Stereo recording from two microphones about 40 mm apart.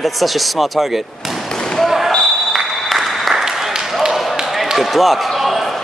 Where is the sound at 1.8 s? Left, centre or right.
Centre.